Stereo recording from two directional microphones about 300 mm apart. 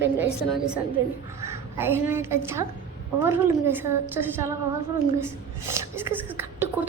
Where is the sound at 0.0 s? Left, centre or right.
Centre.